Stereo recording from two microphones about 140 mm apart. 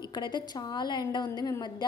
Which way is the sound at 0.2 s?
30° left (ahead or behind).